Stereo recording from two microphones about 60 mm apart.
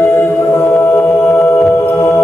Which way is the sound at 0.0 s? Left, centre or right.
Left.